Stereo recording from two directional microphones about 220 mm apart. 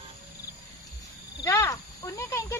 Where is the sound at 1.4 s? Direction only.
15° left (ahead or behind).